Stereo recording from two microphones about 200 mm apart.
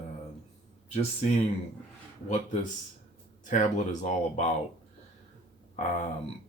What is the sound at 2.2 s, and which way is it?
Speech, 40° left (ahead or behind).